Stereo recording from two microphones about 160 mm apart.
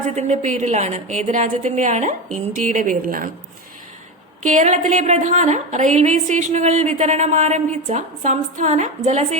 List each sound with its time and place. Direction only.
0.2 s a woman's voice: 50° right (ahead or behind)
4.4 s a woman's voice: 50° right (ahead or behind)